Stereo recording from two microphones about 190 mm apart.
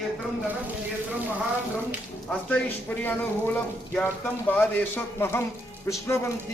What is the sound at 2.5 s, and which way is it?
Speech, 10° left (ahead or behind).